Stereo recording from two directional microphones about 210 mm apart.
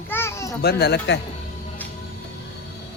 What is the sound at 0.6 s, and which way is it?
Speech, 50° left (ahead or behind).